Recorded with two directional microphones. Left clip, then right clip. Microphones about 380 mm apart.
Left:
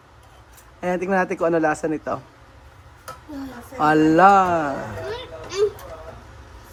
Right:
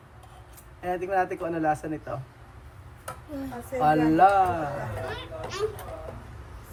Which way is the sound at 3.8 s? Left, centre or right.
Centre.